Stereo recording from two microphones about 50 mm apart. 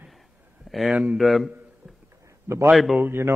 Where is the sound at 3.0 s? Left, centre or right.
Right.